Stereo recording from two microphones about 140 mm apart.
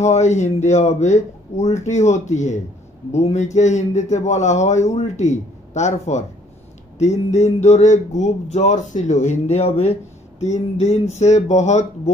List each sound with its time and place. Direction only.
0.0 s a man's voice: 55° left (ahead or behind)
7.3 s a man's voice: 55° left (ahead or behind)